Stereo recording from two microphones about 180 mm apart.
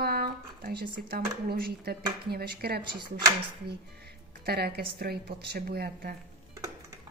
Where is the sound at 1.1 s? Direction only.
60° right (ahead or behind).